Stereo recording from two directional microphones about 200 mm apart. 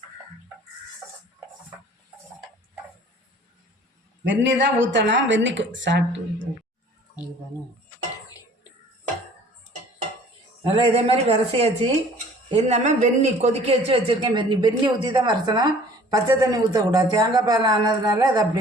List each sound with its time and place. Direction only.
4.2 s speech: 60° right (ahead or behind)
10.6 s a man's voice: 30° right (ahead or behind)